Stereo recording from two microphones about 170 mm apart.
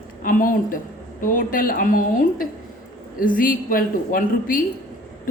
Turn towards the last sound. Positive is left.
turn(degrees=55)  # may be behind; listen again after turning